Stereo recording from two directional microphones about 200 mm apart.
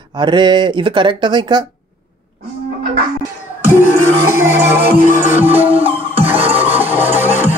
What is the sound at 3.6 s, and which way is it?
Music, 10° right (ahead or behind).